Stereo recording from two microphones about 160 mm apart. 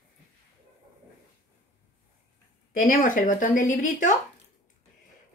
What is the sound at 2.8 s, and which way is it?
Speech, 55° left (ahead or behind).